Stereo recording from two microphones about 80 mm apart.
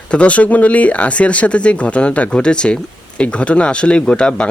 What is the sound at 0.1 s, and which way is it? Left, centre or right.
Speech, centre.